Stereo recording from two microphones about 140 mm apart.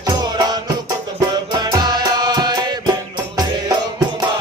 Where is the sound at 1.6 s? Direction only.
30° right (ahead or behind).